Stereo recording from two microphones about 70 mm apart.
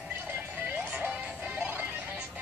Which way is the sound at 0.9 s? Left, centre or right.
Right.